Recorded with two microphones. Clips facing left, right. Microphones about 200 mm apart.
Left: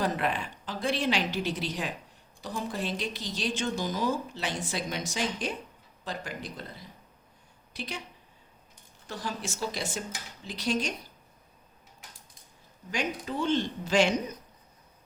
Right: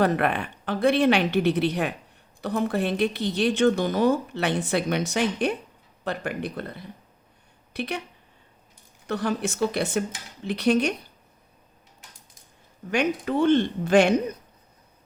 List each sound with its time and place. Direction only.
0.0 s speech: 60° right (ahead or behind)
9.0 s speech: 60° right (ahead or behind)
12.9 s speech: 60° right (ahead or behind)